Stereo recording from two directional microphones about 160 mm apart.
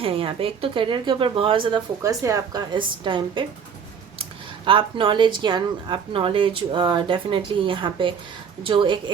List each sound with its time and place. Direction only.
0.0 s speech: 35° right (ahead or behind)
2.0 s a woman's voice: 20° right (ahead or behind)